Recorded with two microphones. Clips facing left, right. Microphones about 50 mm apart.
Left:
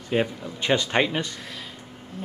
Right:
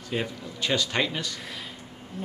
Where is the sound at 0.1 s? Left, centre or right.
Left.